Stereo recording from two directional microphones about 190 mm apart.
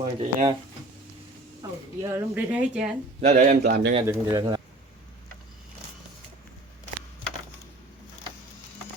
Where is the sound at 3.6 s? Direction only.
55° right (ahead or behind).